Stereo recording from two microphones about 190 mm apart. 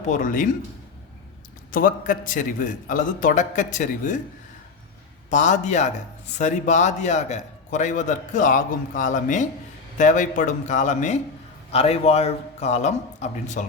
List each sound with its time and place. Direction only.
0.1 s a man's voice: 45° left (ahead or behind)
1.7 s a man's voice: 45° left (ahead or behind)
5.3 s a man's voice: 40° left (ahead or behind)